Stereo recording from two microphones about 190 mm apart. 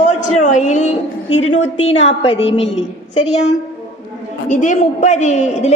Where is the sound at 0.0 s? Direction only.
40° left (ahead or behind).